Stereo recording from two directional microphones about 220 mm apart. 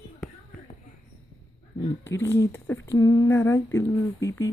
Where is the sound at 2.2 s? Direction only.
10° left (ahead or behind).